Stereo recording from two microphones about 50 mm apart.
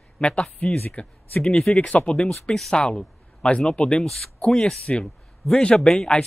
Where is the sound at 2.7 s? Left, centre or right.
Centre.